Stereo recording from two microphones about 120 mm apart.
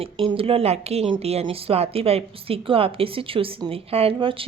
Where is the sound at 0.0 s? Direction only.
50° right (ahead or behind).